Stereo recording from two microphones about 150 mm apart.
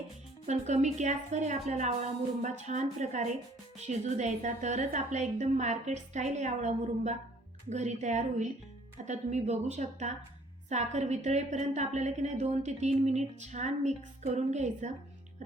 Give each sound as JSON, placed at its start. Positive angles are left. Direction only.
{"t": 0.4, "sound": "a woman's voice", "side_deg": -50}